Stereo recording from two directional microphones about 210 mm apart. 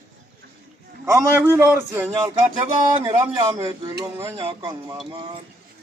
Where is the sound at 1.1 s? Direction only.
10° right (ahead or behind).